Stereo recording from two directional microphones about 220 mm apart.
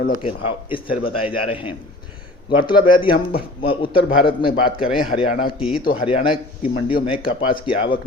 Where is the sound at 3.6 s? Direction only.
25° left (ahead or behind).